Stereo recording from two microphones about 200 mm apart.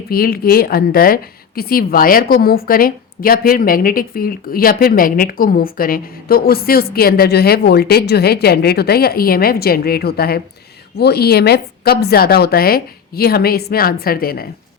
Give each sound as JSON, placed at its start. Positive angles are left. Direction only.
{"t": 0.1, "sound": "a woman's voice", "side_deg": 50}